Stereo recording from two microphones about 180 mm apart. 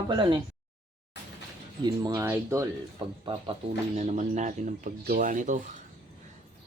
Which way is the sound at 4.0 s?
40° right (ahead or behind).